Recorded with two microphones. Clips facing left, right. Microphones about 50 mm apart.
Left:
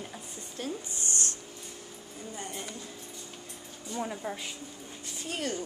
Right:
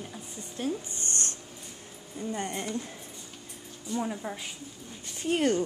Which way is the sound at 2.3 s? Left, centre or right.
Right.